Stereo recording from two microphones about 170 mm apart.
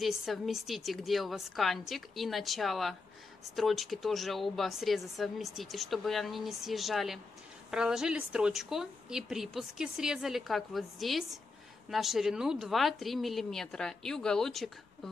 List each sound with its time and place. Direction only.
0.0 s speech: centre (ahead or behind)